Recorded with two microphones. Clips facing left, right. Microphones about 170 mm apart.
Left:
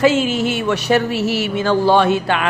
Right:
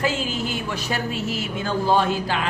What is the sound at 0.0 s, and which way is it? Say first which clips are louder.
Speech: left 10 dB; 80° left.